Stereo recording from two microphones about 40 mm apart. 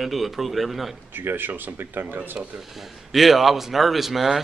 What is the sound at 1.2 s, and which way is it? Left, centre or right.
Speech, right.